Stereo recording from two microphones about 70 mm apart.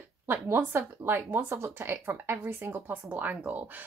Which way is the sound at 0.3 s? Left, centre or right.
Right.